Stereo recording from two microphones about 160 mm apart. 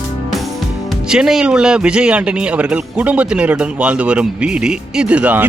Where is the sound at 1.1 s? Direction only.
5° right (ahead or behind).